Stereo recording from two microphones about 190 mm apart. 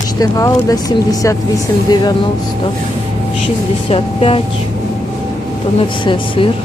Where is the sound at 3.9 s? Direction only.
30° left (ahead or behind).